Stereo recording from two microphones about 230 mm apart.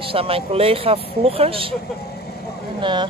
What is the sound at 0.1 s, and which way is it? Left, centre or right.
Speech, right.